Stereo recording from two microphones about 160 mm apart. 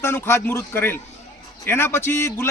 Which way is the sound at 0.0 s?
15° left (ahead or behind).